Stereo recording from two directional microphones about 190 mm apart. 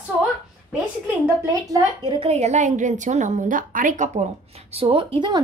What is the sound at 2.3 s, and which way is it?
A woman's voice, 35° right (ahead or behind).